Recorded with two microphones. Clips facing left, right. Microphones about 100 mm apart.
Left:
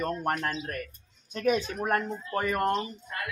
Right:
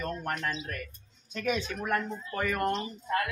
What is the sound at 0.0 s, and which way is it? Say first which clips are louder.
Speech: left 4 dB; 45° left (ahead or behind).